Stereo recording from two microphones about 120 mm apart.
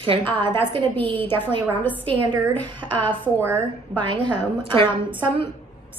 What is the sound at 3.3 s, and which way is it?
Speech, 15° right (ahead or behind).